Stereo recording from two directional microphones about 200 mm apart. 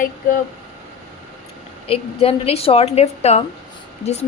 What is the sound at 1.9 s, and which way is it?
Speech, 30° left (ahead or behind).